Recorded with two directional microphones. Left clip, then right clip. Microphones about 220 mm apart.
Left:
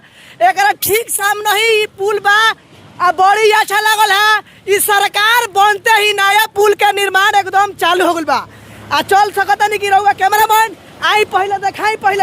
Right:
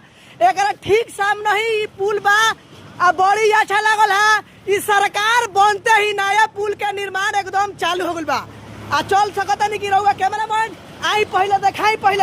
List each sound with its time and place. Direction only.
0.3 s a man's voice: 40° left (ahead or behind)